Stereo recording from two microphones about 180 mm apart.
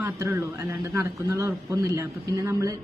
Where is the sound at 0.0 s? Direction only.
15° right (ahead or behind).